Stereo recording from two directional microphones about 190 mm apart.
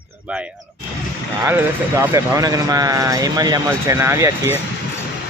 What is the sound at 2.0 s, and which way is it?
Speech, 15° right (ahead or behind).